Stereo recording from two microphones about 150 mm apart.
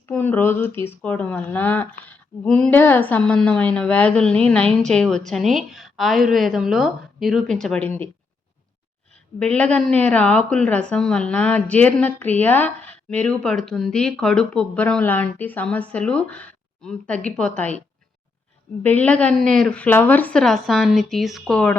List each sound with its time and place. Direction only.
0.0 s a woman's voice: 15° left (ahead or behind)
9.4 s a woman's voice: 10° left (ahead or behind)
18.8 s a woman's voice: 10° left (ahead or behind)